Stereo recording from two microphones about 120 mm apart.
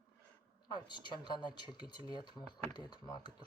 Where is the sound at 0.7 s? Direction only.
40° left (ahead or behind).